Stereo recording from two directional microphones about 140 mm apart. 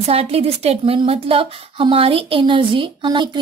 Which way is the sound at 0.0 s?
45° right (ahead or behind).